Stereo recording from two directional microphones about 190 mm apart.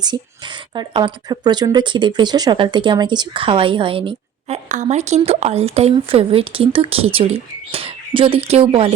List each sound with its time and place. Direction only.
0.0 s speech: 25° right (ahead or behind)